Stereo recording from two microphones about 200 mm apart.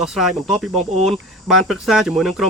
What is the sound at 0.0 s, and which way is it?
Speech, centre (ahead or behind).